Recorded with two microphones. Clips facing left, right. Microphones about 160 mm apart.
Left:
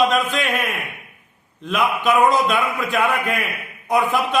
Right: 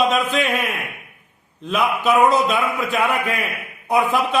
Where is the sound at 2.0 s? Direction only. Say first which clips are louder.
Right 1 dB; 5° right (ahead or behind).